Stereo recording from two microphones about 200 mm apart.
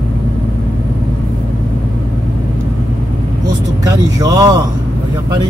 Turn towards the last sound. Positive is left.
turn(degrees=-15)  # may be behind; listen again after turning